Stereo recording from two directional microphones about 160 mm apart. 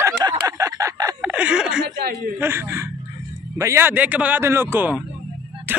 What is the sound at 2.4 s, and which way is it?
Speech, 15° right (ahead or behind).